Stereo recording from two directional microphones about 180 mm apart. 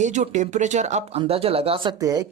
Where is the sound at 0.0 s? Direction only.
40° right (ahead or behind).